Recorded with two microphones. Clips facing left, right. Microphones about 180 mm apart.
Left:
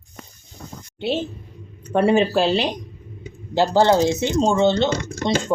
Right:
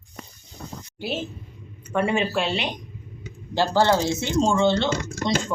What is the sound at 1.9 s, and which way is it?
Speech, 35° left (ahead or behind).